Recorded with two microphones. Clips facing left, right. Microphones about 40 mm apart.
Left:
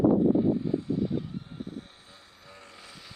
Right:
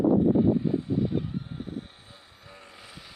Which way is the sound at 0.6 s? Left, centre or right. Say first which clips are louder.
Right 2 dB; right.